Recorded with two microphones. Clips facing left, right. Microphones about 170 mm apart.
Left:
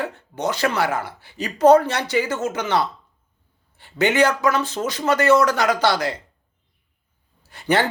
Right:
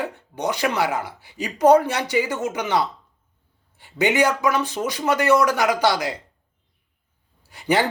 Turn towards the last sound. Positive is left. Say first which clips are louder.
# even
turn(degrees=-15)  # may be behind; listen again after turning